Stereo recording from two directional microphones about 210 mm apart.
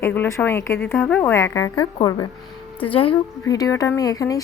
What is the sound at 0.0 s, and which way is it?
Speech, 10° left (ahead or behind).